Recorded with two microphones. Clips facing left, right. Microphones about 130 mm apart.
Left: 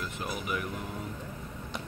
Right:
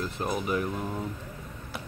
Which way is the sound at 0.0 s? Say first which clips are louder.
Right 6 dB; 35° right (ahead or behind).